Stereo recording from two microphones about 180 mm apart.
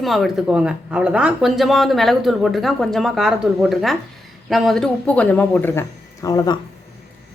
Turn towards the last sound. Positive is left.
turn(degrees=20)  # may be behind; listen again after turning